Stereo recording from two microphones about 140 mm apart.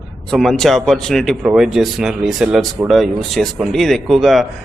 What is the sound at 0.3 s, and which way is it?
Speech, centre (ahead or behind).